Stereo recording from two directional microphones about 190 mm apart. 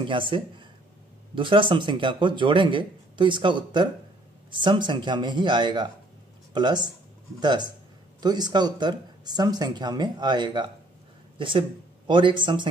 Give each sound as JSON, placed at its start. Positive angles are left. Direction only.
{"t": 0.0, "sound": "speech", "side_deg": -25}